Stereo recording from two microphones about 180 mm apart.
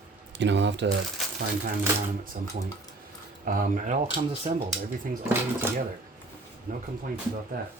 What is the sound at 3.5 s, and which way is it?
Speech, 50° right (ahead or behind).